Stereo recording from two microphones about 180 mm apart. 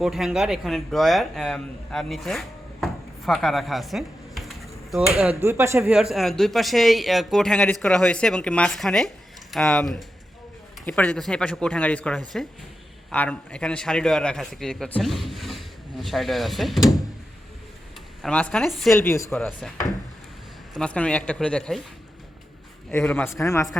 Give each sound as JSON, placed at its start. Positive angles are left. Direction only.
{"t": 0.0, "sound": "a man's voice", "side_deg": 0}
{"t": 5.8, "sound": "speech", "side_deg": 0}
{"t": 18.2, "sound": "speech", "side_deg": 5}
{"t": 18.9, "sound": "a man's voice", "side_deg": 15}
{"t": 20.7, "sound": "speech", "side_deg": 5}
{"t": 23.0, "sound": "a man's voice", "side_deg": 10}